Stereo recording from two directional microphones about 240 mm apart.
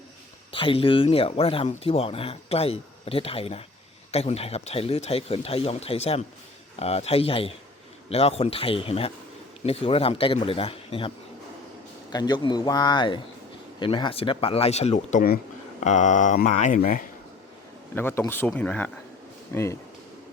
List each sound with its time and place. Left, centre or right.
0.5 s speech: left
12.1 s speech: centre
17.9 s speech: centre